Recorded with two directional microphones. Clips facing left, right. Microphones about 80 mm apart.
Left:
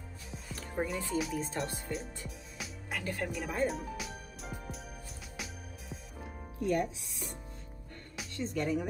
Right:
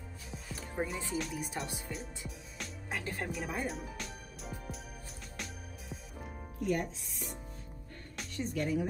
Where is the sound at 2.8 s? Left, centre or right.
Right.